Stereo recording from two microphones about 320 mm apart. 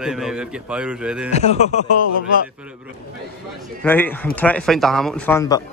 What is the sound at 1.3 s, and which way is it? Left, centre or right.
Speech, left.